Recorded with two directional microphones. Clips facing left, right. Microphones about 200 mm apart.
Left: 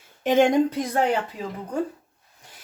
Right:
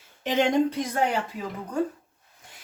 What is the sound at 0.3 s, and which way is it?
Speech, 45° left (ahead or behind).